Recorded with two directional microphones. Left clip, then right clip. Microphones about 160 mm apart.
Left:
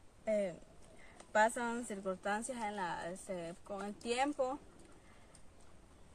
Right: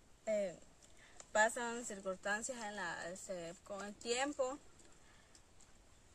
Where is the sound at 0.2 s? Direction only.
15° right (ahead or behind).